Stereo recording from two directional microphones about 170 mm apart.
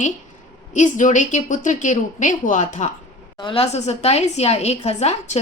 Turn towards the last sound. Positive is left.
turn(degrees=40)  # may be behind; listen again after turning